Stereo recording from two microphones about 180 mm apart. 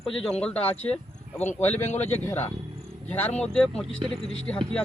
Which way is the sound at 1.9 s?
10° left (ahead or behind).